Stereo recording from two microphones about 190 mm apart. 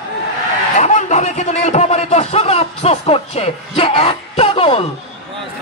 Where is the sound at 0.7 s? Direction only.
35° left (ahead or behind).